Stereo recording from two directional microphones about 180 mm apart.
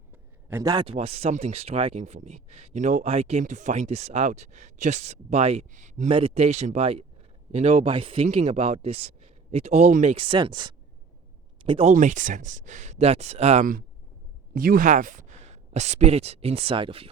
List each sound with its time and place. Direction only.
0.4 s speech: 15° right (ahead or behind)
0.9 s speech: 35° right (ahead or behind)
11.9 s speech: 45° right (ahead or behind); by 17.1 s 30° right (ahead or behind)